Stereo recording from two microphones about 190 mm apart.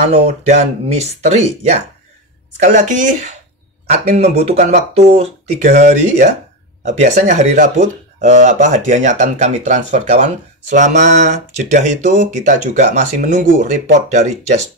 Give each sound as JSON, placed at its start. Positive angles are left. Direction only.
{"t": 0.0, "sound": "speech", "side_deg": -35}